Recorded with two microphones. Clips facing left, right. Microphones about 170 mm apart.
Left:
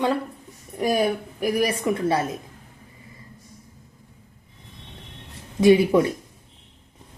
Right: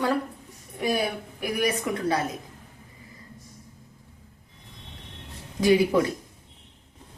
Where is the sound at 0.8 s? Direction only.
40° left (ahead or behind).